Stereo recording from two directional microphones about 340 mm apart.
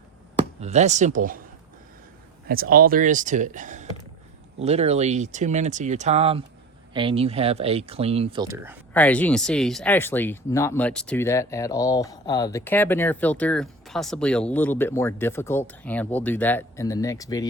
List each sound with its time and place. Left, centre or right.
0.6 s speech: centre
2.5 s speech: right; by 8.8 s centre
8.9 s speech: centre